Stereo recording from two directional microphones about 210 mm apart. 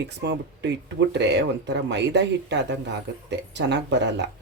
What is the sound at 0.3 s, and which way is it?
Speech, 55° right (ahead or behind).